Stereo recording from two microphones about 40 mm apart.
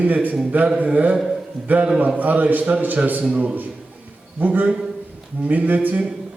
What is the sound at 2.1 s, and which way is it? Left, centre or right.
A man's voice, right.